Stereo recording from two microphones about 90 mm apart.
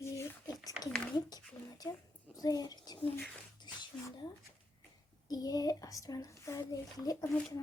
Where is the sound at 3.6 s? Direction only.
55° left (ahead or behind).